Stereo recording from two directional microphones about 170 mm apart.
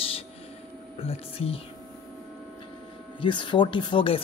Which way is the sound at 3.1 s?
30° left (ahead or behind).